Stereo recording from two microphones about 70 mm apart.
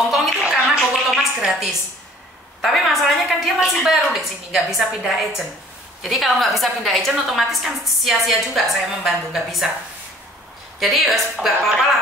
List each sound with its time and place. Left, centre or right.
0.1 s a sound: centre
2.6 s a woman's voice: centre
10.8 s a woman's voice: centre